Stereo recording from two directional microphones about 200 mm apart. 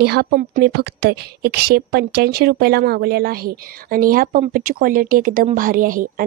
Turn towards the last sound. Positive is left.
turn(degrees=-45)  # may be behind; listen again after turning